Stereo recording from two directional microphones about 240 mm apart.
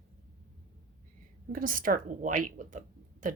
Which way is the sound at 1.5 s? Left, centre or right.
Right.